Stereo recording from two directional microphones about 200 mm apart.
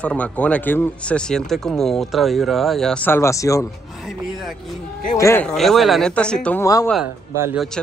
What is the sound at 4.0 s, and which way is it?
Speech, centre (ahead or behind).